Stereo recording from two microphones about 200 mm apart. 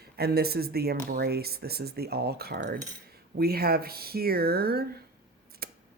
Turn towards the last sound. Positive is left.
turn(degrees=-50)  # may be behind; listen again after turning